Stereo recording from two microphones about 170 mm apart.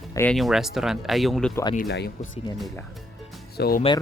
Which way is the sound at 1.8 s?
80° left.